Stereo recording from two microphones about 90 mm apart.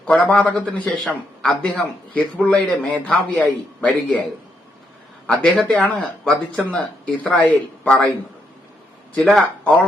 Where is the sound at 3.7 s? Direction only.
15° left (ahead or behind).